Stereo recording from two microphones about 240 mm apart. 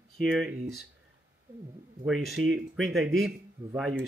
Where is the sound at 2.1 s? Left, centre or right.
Centre.